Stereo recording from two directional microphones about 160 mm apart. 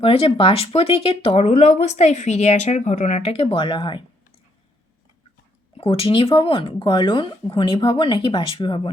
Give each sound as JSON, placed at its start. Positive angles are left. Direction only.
{"t": 0.0, "sound": "speech", "side_deg": 35}
{"t": 5.7, "sound": "speech", "side_deg": 35}